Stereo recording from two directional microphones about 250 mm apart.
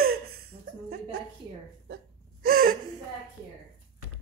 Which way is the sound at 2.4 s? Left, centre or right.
Right.